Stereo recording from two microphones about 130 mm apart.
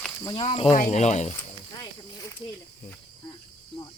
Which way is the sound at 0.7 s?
65° left (ahead or behind).